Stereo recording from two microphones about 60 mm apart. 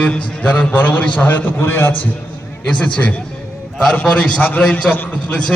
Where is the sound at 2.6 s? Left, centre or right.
Centre.